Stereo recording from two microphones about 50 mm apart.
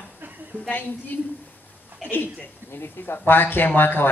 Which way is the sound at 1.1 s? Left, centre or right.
Left.